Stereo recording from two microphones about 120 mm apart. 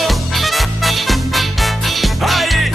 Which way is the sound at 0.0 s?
Centre (ahead or behind).